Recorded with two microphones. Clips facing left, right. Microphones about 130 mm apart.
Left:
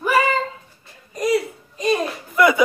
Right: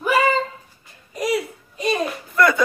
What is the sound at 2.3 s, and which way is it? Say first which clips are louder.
Speech: left 2 dB; 10° left (ahead or behind).